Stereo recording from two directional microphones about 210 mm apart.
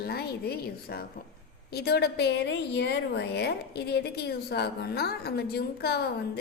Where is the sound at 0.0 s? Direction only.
50° left (ahead or behind).